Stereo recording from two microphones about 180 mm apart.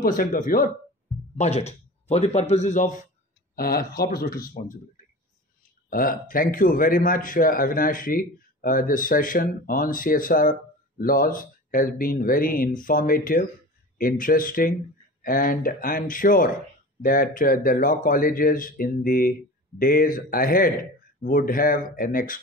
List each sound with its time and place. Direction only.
0.0 s a man's voice: 50° left (ahead or behind)
1.4 s speech: 35° left (ahead or behind)
3.5 s speech: 60° left (ahead or behind)
5.9 s a man's voice: 50° left (ahead or behind)